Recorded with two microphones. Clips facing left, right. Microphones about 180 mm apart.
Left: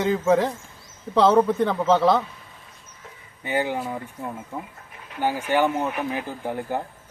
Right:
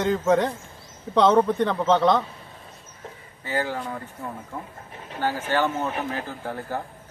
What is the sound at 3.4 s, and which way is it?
A man's voice, 20° left (ahead or behind).